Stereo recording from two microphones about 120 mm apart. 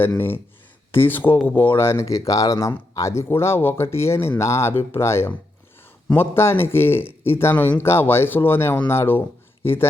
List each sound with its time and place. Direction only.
0.0 s a man's voice: 20° left (ahead or behind)